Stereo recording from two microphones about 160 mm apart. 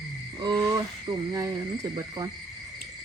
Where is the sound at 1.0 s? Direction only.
20° right (ahead or behind).